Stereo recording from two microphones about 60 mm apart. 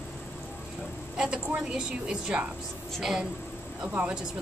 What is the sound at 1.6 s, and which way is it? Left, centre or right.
Speech, centre.